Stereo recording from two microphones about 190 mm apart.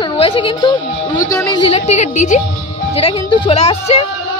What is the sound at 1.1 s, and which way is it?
Speech, 15° left (ahead or behind).